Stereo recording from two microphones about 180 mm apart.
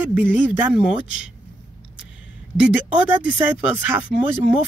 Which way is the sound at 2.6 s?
5° right (ahead or behind).